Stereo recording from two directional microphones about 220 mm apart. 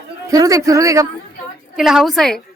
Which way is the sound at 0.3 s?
15° right (ahead or behind).